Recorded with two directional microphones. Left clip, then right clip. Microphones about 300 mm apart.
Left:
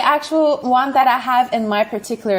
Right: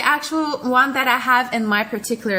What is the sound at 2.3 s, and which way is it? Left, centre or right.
Speech, centre.